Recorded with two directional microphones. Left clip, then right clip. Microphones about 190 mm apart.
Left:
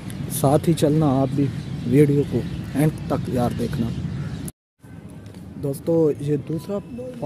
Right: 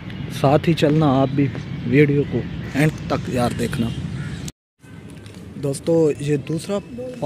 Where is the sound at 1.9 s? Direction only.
10° left (ahead or behind).